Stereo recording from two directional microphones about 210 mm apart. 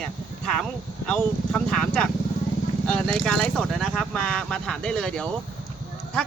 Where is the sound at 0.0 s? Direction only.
5° left (ahead or behind).